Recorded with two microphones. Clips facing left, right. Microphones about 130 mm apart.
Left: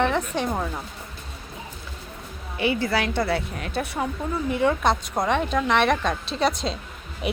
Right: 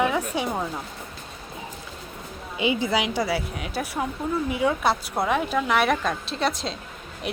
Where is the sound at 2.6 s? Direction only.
15° right (ahead or behind).